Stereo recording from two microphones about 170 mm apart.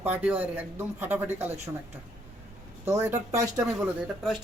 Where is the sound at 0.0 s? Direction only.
10° right (ahead or behind).